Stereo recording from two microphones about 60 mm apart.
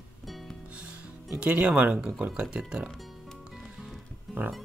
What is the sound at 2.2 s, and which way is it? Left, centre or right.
Speech, centre.